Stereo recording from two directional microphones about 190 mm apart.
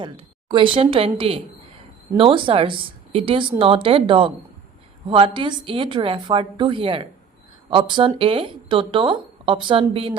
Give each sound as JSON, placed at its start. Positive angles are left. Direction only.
{"t": 0.5, "sound": "a woman's voice", "side_deg": -25}